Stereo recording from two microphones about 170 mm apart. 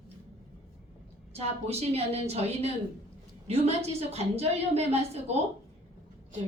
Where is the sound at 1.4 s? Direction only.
35° right (ahead or behind).